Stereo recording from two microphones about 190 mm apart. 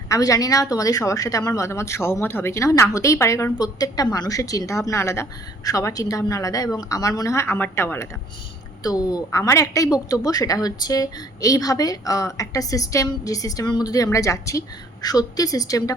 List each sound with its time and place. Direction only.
0.1 s a woman's voice: 20° left (ahead or behind)